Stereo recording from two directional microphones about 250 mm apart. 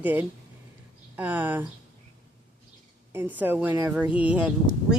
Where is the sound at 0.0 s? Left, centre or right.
Centre.